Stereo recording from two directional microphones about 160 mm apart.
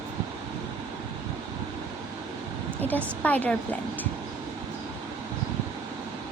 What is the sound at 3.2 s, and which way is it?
Speech, 10° left (ahead or behind).